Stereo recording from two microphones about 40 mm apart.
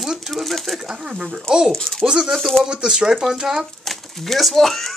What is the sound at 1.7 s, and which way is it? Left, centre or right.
Speech, centre.